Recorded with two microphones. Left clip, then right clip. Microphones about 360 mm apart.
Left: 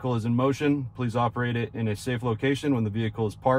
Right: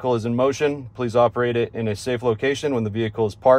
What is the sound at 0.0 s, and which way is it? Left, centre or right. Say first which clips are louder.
Speech: right 7 dB; right.